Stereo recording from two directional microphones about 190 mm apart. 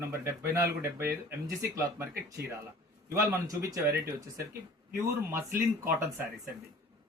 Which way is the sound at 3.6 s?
15° right (ahead or behind).